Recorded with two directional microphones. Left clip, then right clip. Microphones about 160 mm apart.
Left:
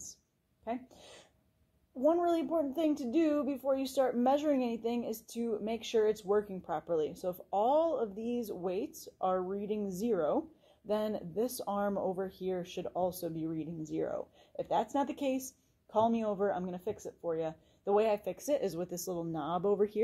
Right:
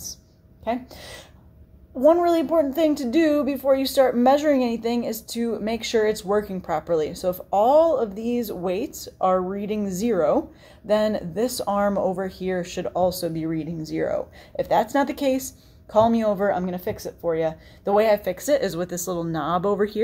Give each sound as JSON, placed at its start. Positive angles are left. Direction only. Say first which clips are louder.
{"t": 0.7, "sound": "a woman's voice", "louder": "right 13 dB", "side_deg": 30}